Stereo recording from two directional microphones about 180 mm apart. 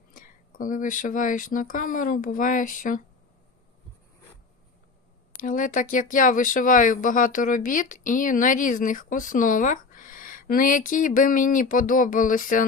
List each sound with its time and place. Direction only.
0.1 s speech: 50° left (ahead or behind)
5.4 s speech: 45° left (ahead or behind)